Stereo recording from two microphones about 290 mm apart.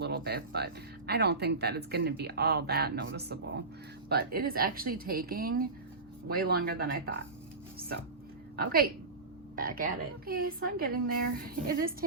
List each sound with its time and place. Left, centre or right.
0.0 s speech: right
8.5 s a woman's voice: right